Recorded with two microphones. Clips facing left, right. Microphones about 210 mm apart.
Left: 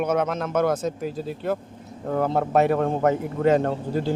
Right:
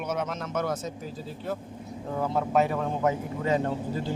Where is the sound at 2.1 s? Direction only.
60° left (ahead or behind).